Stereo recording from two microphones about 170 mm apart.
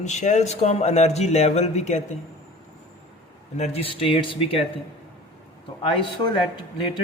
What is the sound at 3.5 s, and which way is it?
Speech, 40° left (ahead or behind).